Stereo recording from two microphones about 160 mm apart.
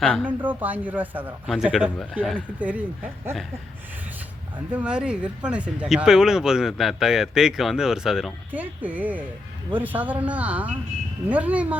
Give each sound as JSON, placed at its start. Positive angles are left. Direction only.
{"t": 0.0, "sound": "speech", "side_deg": 5}
{"t": 0.3, "sound": "speech", "side_deg": -10}
{"t": 1.5, "sound": "speech", "side_deg": 0}
{"t": 4.7, "sound": "speech", "side_deg": -5}